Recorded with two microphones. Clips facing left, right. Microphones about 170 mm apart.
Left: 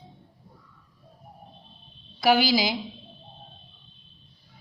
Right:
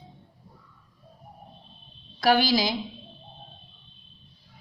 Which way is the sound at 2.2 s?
10° left (ahead or behind).